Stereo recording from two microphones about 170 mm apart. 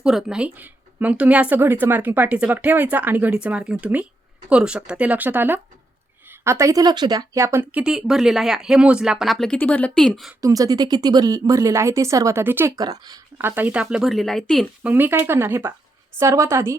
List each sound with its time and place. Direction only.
0.0 s speech: 5° right (ahead or behind)
10.4 s a woman's voice: 20° right (ahead or behind)
13.6 s speech: 10° right (ahead or behind)
14.8 s speech: 10° right (ahead or behind)